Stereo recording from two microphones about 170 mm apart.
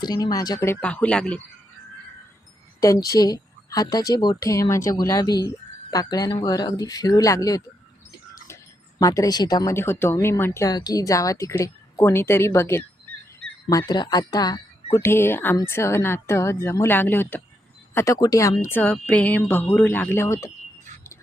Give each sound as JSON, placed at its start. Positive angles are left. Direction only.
{"t": 0.0, "sound": "speech", "side_deg": 25}
{"t": 2.8, "sound": "a woman's voice", "side_deg": 20}
{"t": 9.0, "sound": "a woman's voice", "side_deg": 20}